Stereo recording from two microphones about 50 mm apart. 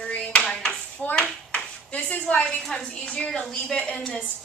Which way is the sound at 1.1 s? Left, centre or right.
Left.